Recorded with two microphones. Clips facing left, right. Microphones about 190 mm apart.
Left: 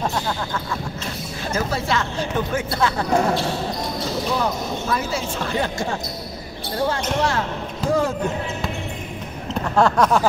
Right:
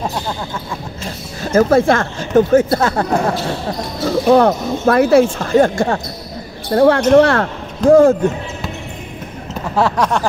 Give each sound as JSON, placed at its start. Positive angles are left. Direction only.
{"t": 1.5, "sound": "speech", "side_deg": -50}
{"t": 4.3, "sound": "speech", "side_deg": -65}
{"t": 5.4, "sound": "speech", "side_deg": -45}
{"t": 6.7, "sound": "speech", "side_deg": -65}
{"t": 7.9, "sound": "speech", "side_deg": -50}
{"t": 9.8, "sound": "a sound", "side_deg": 0}